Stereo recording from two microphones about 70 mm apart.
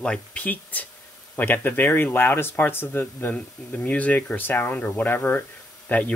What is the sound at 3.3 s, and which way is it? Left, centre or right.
Speech, centre.